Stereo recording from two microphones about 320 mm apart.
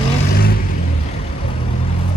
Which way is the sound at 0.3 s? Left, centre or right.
Left.